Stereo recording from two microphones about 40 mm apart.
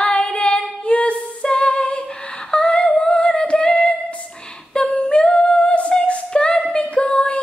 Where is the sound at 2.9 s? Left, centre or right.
Left.